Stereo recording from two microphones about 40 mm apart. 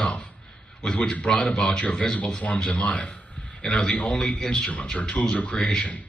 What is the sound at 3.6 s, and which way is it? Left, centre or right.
Speech, centre.